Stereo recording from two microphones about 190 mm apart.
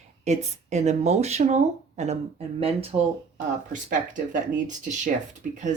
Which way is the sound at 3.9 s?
45° right (ahead or behind).